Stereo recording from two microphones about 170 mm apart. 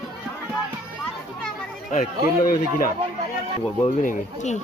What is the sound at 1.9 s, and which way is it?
Speech, 50° left (ahead or behind).